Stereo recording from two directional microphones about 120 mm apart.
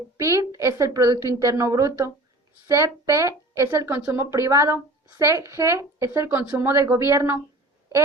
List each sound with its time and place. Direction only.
0.2 s speech: 25° right (ahead or behind)